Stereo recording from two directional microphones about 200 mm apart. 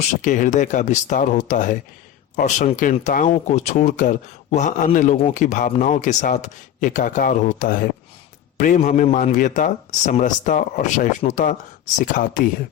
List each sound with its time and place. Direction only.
0.2 s speech: 40° left (ahead or behind)